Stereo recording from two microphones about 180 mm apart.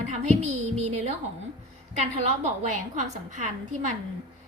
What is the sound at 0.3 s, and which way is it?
A woman's voice, 40° right (ahead or behind).